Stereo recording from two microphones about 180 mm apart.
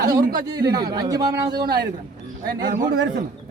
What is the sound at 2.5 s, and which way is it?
Speech, 50° right (ahead or behind).